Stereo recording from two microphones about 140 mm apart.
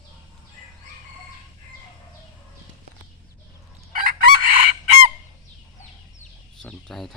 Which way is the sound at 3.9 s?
90° right.